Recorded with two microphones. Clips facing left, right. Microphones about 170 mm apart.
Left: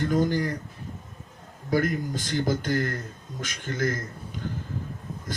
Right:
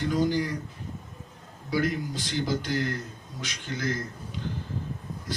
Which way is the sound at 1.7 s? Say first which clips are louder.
Left 2 dB; 50° left (ahead or behind).